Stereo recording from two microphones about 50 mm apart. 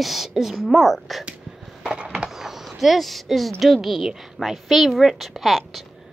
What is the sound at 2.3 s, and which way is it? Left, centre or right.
Speech, centre.